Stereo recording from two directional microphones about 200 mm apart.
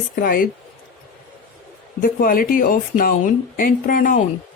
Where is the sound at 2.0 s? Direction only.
45° left (ahead or behind).